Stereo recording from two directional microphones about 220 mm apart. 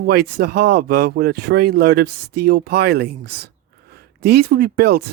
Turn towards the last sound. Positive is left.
turn(degrees=-45)  # may be behind; listen again after turning